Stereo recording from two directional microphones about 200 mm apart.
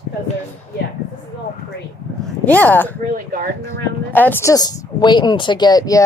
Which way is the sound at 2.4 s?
10° left (ahead or behind).